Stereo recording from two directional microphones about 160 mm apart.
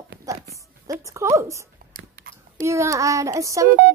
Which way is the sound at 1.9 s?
70° right (ahead or behind).